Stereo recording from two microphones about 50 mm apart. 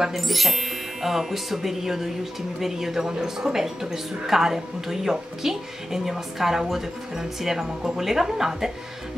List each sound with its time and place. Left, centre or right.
0.0 s a woman's voice: centre